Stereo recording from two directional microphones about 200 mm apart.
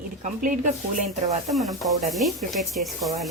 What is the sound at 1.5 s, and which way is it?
Speech, centre (ahead or behind).